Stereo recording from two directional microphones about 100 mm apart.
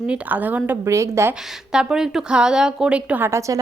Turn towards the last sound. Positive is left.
turn(degrees=-30)  # may be behind; listen again after turning